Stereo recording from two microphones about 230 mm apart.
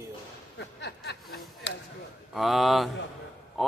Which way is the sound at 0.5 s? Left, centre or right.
Left.